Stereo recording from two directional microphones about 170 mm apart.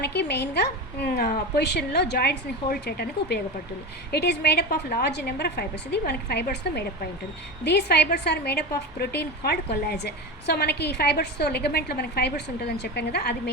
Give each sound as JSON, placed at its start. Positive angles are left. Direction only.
{"t": 0.0, "sound": "a woman's voice", "side_deg": 75}